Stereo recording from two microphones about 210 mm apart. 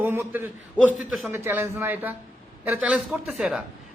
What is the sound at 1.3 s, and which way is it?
A man's voice, 10° right (ahead or behind).